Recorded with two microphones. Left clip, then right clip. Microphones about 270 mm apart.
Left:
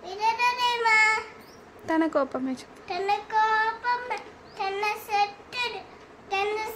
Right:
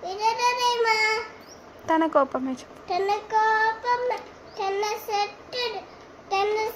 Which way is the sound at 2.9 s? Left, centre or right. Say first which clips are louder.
Right 3 dB; centre.